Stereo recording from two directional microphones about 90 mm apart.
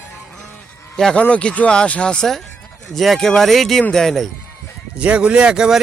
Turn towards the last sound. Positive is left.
turn(degrees=-10)  # may be behind; listen again after turning